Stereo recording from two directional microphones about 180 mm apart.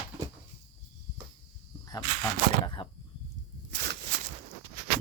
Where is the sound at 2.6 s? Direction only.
25° left (ahead or behind).